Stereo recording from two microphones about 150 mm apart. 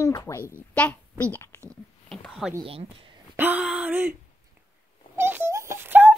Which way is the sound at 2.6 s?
40° right (ahead or behind).